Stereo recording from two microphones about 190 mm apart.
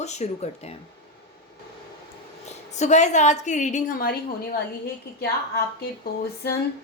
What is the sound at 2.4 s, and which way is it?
A woman's voice, 40° left (ahead or behind).